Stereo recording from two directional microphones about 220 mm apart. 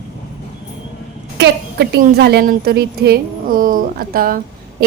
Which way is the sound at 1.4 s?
50° right (ahead or behind).